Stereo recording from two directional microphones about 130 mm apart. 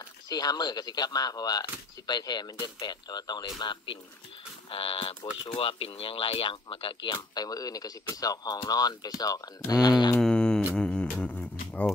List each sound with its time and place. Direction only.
0.3 s speech: 30° left (ahead or behind)
10.1 s mantra: 5° left (ahead or behind)
10.7 s music: 5° left (ahead or behind)